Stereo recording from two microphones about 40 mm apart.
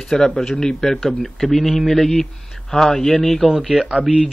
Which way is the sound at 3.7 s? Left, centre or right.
Right.